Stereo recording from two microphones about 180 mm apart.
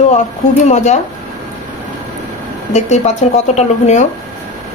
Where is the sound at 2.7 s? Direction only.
40° left (ahead or behind).